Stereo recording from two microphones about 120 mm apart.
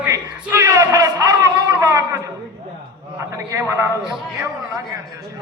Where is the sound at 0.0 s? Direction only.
20° right (ahead or behind).